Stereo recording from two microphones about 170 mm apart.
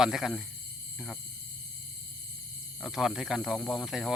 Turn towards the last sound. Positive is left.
turn(degrees=0)  # may be behind; listen again after turning